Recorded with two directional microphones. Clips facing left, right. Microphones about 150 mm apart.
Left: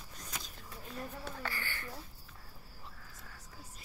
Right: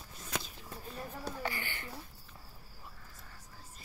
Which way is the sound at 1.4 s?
15° right (ahead or behind).